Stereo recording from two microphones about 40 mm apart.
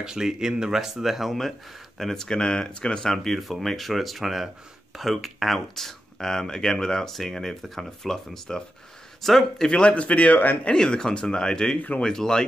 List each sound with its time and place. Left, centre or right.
0.0 s speech: centre
2.2 s speech: centre
3.1 s speech: centre
9.7 s a man's voice: left
10.7 s speech: centre